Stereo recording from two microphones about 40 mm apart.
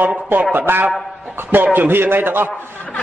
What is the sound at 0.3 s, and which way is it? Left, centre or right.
A man's voice, right.